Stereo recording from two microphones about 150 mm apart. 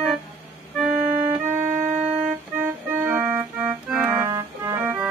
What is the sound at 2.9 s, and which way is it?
Organ, 15° right (ahead or behind).